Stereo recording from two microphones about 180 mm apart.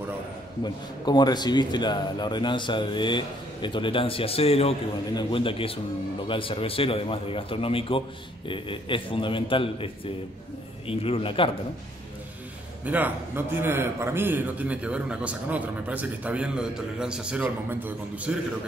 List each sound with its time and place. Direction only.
1.0 s a man's voice: 25° left (ahead or behind)
10.9 s a man's voice: 30° left (ahead or behind)
12.8 s speech: 10° right (ahead or behind)